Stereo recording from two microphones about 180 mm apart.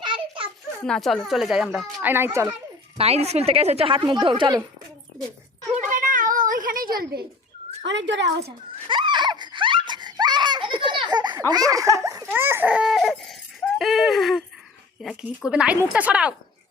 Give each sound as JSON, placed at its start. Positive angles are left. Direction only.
{"t": 0.0, "sound": "a sound", "side_deg": -25}
{"t": 0.9, "sound": "speech", "side_deg": 5}
{"t": 3.0, "sound": "speech", "side_deg": -35}
{"t": 5.9, "sound": "a sound", "side_deg": -45}
{"t": 7.9, "sound": "a woman's voice", "side_deg": -85}
{"t": 8.9, "sound": "baby laughter", "side_deg": -25}
{"t": 15.0, "sound": "a woman's voice", "side_deg": 0}